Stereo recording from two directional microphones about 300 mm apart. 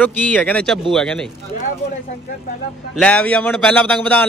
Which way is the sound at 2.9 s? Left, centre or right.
Centre.